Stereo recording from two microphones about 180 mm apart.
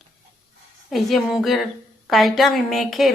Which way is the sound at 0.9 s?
Centre (ahead or behind).